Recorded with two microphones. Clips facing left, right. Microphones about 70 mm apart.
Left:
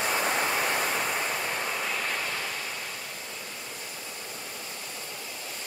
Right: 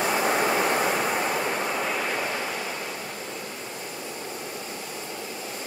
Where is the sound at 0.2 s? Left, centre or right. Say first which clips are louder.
Right 5 dB; centre.